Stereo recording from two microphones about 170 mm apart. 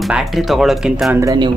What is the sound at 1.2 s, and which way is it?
Speech, 20° right (ahead or behind).